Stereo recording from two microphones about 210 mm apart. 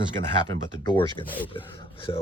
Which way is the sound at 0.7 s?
20° left (ahead or behind).